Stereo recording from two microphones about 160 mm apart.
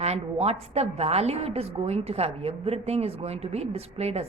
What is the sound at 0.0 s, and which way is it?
A woman's voice, 40° right (ahead or behind).